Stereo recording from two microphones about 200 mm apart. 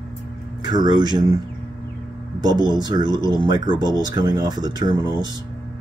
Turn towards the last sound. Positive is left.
turn(degrees=-20)  # may be behind; listen again after turning